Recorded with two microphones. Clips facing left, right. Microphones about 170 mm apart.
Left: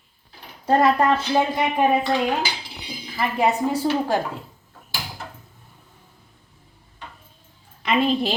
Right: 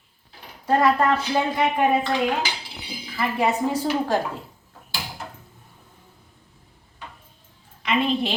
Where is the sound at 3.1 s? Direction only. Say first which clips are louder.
Left 1 dB; 15° left (ahead or behind).